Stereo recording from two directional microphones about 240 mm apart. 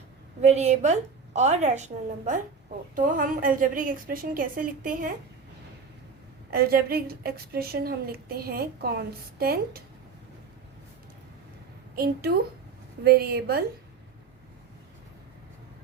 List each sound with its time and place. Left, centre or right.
0.4 s a woman's voice: right
6.5 s a woman's voice: right
11.9 s a woman's voice: right